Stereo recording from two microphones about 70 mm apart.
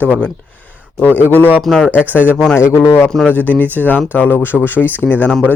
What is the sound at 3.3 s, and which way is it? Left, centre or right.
Speech, left.